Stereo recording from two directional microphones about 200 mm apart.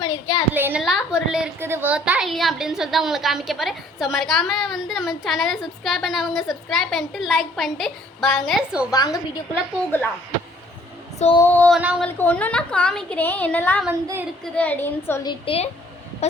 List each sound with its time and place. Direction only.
0.0 s a sound: 20° left (ahead or behind)
0.5 s a woman's voice: 10° right (ahead or behind)
8.9 s a woman's voice: 20° left (ahead or behind)
11.3 s a woman's voice: 10° left (ahead or behind)
11.8 s a woman's voice: 5° right (ahead or behind)
12.0 s a woman's voice: 10° left (ahead or behind)
13.8 s a woman's voice: 10° right (ahead or behind)
14.4 s a woman's voice: 5° left (ahead or behind); by 15.7 s 30° left (ahead or behind)